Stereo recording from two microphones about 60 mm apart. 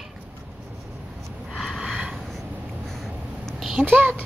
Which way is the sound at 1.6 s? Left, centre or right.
Centre.